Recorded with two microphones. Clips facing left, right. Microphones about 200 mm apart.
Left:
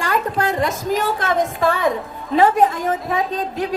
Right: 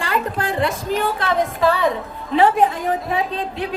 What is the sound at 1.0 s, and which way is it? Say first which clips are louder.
A woman's voice: right 1 dB; 45° left (ahead or behind).